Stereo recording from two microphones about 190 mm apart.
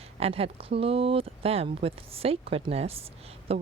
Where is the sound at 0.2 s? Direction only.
30° right (ahead or behind).